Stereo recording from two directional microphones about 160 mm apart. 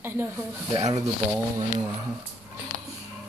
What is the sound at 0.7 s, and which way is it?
Speech, 25° right (ahead or behind).